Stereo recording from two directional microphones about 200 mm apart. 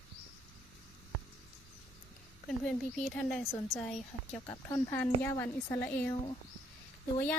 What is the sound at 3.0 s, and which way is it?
Speech, centre (ahead or behind).